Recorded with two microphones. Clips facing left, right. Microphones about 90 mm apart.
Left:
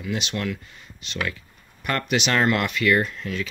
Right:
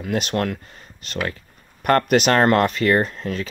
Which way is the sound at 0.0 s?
45° right (ahead or behind).